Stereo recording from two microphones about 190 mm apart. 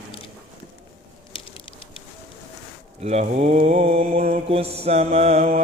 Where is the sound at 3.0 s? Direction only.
35° right (ahead or behind).